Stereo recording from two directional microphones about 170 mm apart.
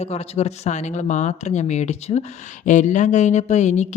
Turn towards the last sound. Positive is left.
turn(degrees=45)  # may be behind; listen again after turning